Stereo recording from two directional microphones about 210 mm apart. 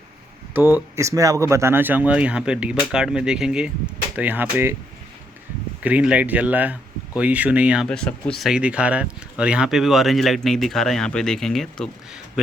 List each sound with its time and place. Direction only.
0.5 s speech: 10° right (ahead or behind)
5.8 s speech: 5° right (ahead or behind)